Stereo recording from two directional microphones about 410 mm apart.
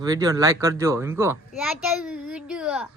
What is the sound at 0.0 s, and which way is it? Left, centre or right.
Speech, centre.